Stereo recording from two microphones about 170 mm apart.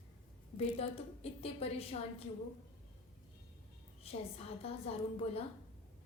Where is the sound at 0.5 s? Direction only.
35° left (ahead or behind).